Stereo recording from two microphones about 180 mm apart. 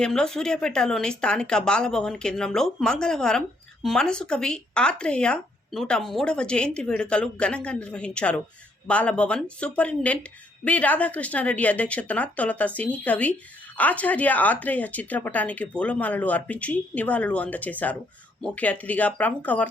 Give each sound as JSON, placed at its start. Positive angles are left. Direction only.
{"t": 0.0, "sound": "speech", "side_deg": 5}